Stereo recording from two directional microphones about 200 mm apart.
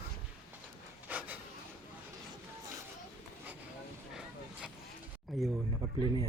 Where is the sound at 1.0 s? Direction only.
10° right (ahead or behind).